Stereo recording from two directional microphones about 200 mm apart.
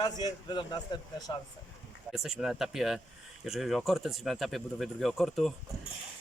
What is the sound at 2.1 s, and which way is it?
Speech, centre (ahead or behind).